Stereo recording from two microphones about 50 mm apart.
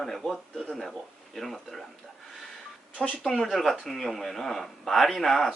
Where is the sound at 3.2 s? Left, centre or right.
Centre.